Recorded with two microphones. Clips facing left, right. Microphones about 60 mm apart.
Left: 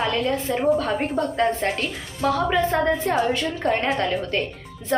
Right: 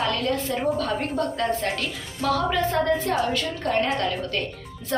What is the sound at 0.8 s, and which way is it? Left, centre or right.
A woman's voice, left.